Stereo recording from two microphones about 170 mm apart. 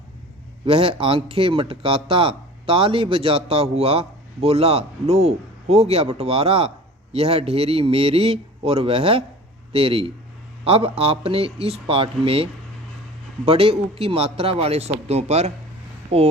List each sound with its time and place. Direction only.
0.6 s speech: 35° right (ahead or behind)